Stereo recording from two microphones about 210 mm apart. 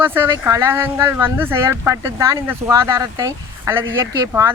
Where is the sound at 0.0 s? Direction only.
10° right (ahead or behind).